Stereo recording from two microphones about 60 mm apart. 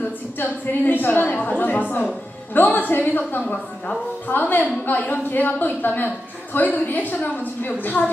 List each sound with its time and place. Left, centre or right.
0.3 s a woman's voice: left